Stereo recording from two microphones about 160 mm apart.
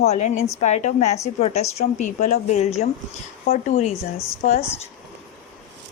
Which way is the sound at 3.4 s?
60° left (ahead or behind).